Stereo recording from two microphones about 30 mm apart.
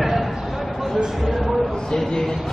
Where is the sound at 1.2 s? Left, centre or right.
Centre.